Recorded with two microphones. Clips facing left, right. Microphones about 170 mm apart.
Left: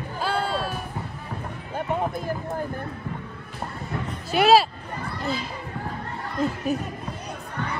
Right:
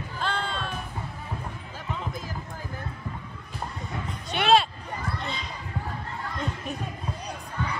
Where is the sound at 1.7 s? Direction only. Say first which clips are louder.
Left 10 dB; 55° left (ahead or behind).